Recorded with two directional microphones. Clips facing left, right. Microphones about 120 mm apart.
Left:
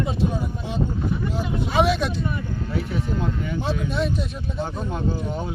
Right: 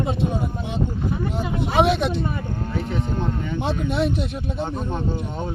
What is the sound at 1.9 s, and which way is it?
Speech, 25° right (ahead or behind).